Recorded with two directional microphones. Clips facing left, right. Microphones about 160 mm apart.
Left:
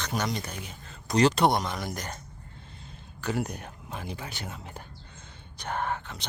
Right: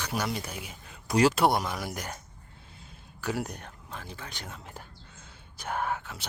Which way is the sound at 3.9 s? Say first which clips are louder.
Left 5 dB; 15° left (ahead or behind).